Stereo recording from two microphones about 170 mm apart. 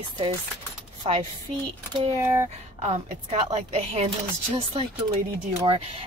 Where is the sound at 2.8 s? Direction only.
40° right (ahead or behind).